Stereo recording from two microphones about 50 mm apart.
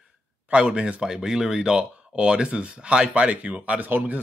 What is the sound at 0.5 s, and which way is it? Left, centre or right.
Speech, right.